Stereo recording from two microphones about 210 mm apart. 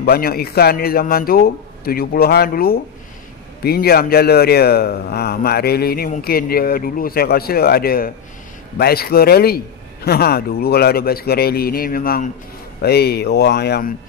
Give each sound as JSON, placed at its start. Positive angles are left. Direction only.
{"t": 0.0, "sound": "a man's voice", "side_deg": 45}